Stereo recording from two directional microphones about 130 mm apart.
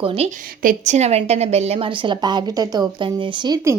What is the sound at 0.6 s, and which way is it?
A woman's voice, 65° right (ahead or behind).